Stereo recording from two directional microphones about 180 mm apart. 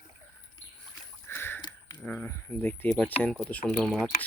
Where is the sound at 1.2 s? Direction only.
10° left (ahead or behind).